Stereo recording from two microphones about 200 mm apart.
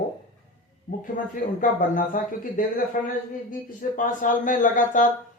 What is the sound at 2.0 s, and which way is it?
Speech, 40° left (ahead or behind).